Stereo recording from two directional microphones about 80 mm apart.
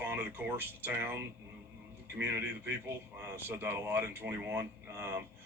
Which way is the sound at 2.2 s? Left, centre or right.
Right.